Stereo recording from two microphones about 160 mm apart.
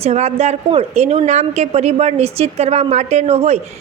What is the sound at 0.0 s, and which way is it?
A woman's voice, 40° right (ahead or behind).